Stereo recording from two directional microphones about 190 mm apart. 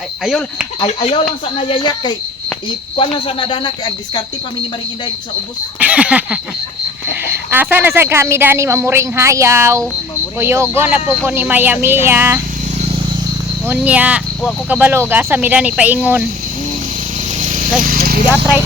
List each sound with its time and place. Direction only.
0.3 s speech: centre (ahead or behind)
0.8 s speech: 30° left (ahead or behind)
5.8 s a sound: 5° right (ahead or behind)
7.5 s speech: 10° right (ahead or behind)
13.7 s speech: 10° right (ahead or behind)
17.4 s a sound: 45° right (ahead or behind)
17.7 s horse: 50° right (ahead or behind)